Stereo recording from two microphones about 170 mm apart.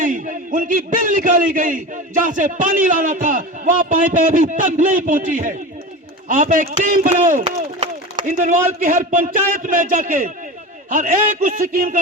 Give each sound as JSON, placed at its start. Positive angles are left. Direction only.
{"t": 0.0, "sound": "a man's voice", "side_deg": -50}